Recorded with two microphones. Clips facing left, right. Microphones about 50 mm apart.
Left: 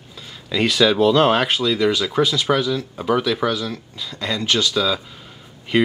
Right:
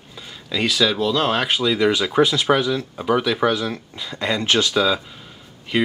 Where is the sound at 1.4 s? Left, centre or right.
Centre; by 4.9 s right.